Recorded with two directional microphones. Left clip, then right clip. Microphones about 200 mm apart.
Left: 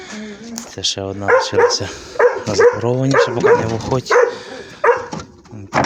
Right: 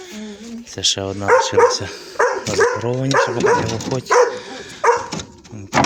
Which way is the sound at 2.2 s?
50° right (ahead or behind).